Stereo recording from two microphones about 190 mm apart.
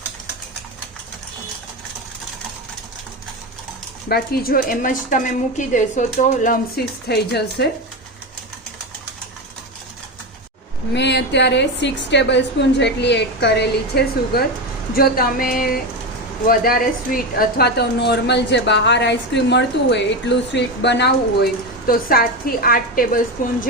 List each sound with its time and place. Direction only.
4.1 s a woman's voice: 55° left (ahead or behind)
10.9 s a woman's voice: 65° left (ahead or behind); by 23.6 s 45° left (ahead or behind)